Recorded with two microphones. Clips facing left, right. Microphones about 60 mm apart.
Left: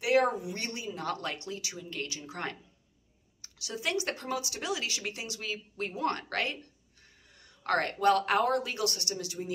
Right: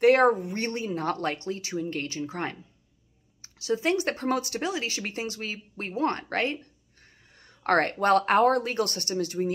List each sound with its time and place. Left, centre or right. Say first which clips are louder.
0.0 s speech: right 7 dB; right